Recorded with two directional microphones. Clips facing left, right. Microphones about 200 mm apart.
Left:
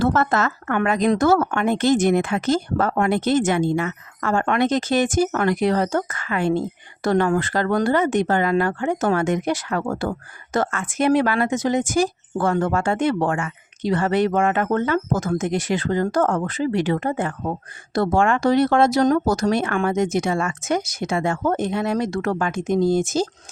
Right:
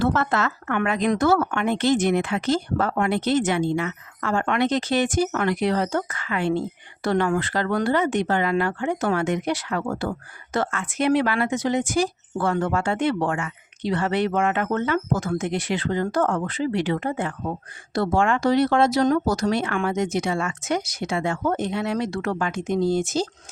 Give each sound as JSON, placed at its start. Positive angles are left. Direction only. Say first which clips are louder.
{"t": 0.0, "sound": "speech", "louder": "left 3 dB", "side_deg": 45}